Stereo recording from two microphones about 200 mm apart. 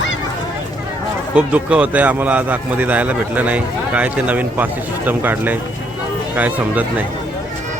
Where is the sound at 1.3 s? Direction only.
5° right (ahead or behind).